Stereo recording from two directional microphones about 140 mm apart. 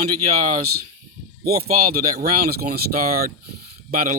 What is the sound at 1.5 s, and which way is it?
A man's voice, 90° right.